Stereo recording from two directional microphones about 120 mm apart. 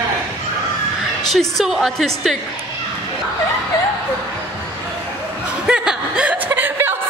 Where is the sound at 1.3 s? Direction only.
Centre (ahead or behind).